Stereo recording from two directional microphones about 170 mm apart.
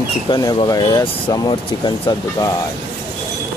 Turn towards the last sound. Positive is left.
turn(degrees=20)  # may be behind; listen again after turning